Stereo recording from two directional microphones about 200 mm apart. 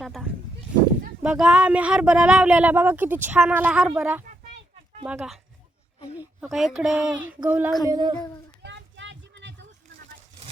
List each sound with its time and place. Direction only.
0.0 s a sound: centre (ahead or behind)
1.2 s speech: 5° right (ahead or behind)
6.4 s speech: centre (ahead or behind)
7.4 s child singing: 5° right (ahead or behind)
7.9 s speech: 20° right (ahead or behind)
8.6 s a sound: 65° right (ahead or behind)